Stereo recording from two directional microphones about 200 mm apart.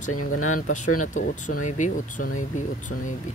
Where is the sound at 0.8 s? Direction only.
90° left.